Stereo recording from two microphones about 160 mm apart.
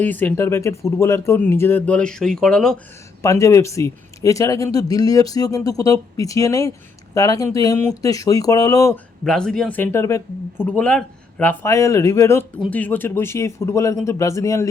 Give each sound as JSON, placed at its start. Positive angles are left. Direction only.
{"t": 0.0, "sound": "speech", "side_deg": 10}
{"t": 3.2, "sound": "speech", "side_deg": 20}
{"t": 9.2, "sound": "speech", "side_deg": 5}
{"t": 11.7, "sound": "speech", "side_deg": 20}